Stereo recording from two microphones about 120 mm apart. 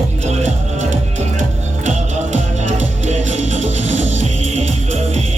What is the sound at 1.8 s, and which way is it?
Music, 85° right.